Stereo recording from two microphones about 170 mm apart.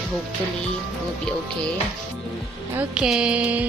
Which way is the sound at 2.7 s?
5° right (ahead or behind).